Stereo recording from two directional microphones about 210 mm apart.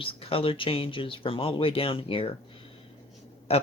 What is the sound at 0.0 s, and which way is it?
Speech, 25° left (ahead or behind).